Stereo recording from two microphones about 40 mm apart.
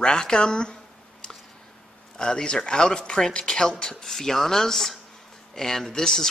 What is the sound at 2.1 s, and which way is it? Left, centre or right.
Speech, centre.